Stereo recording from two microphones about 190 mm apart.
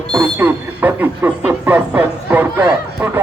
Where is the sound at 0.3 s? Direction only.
10° right (ahead or behind).